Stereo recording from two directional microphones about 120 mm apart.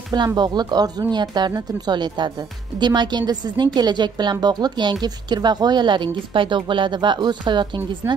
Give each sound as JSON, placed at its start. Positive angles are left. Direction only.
{"t": 0.4, "sound": "speech", "side_deg": -35}